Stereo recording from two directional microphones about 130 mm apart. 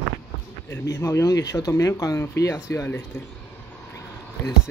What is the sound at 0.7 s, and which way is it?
Speech, 20° left (ahead or behind).